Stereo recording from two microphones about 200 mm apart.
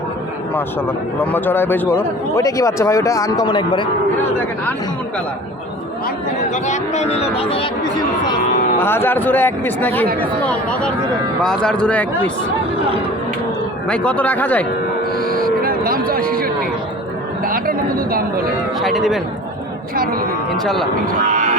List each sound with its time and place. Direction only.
1.3 s speech: 10° left (ahead or behind)
6.7 s speech: 35° left (ahead or behind)
8.8 s a man's voice: 10° left (ahead or behind)
13.8 s speech: 5° left (ahead or behind)
15.6 s a sound: 45° right (ahead or behind)
18.8 s a man's voice: centre (ahead or behind)